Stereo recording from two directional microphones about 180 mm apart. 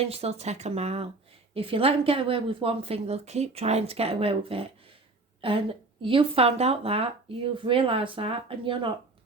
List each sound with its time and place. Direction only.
0.0 s speech: 35° right (ahead or behind)